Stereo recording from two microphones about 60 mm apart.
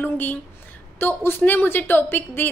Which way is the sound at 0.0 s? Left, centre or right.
Left.